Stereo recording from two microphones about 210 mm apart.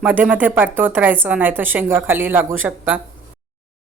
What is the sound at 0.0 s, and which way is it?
A woman's voice, 5° right (ahead or behind).